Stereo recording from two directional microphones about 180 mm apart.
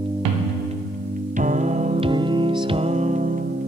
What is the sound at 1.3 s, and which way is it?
Music, 45° right (ahead or behind).